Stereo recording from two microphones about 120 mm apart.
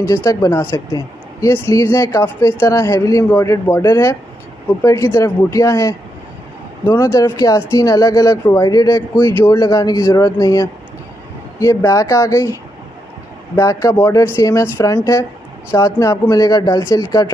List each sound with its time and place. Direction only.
0.0 s speech: 25° left (ahead or behind)
0.7 s speech: 35° left (ahead or behind)
1.5 s speech: 20° left (ahead or behind)
13.6 s speech: 25° left (ahead or behind)